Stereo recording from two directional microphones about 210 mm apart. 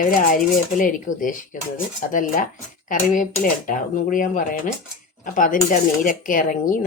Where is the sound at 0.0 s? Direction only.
40° left (ahead or behind).